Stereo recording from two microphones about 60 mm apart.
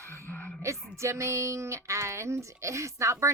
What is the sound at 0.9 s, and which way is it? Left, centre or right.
Speech, right.